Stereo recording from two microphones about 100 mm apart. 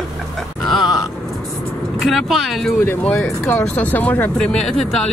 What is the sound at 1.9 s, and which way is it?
Speech, 5° right (ahead or behind).